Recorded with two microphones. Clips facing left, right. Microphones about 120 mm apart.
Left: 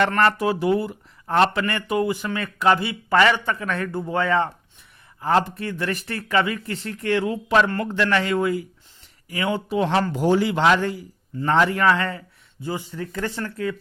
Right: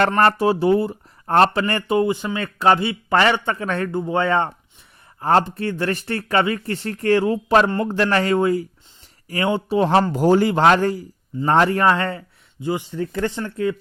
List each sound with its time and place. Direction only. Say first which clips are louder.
0.2 s a man's voice: right 3 dB; 35° right (ahead or behind)